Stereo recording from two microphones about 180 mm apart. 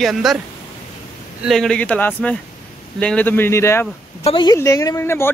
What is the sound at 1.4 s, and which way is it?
Speech, centre (ahead or behind).